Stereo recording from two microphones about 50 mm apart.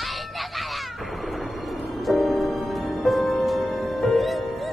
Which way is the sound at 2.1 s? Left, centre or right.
Centre.